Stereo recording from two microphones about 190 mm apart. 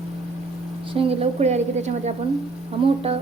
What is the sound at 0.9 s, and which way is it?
A woman's voice, 35° right (ahead or behind).